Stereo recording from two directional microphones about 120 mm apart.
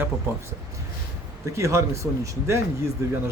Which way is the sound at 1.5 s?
25° right (ahead or behind).